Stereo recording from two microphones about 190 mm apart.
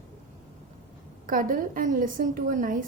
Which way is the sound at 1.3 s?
45° right (ahead or behind).